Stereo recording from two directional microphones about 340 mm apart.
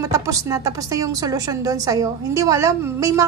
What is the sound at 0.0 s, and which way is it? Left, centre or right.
A child's voice, centre.